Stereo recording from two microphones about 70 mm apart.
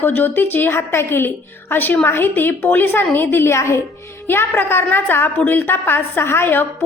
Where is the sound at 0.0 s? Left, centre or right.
Left.